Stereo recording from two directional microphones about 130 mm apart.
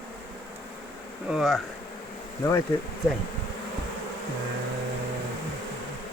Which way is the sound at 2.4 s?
30° left (ahead or behind).